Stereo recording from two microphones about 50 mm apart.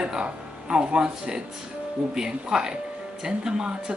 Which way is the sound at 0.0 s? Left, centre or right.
Centre.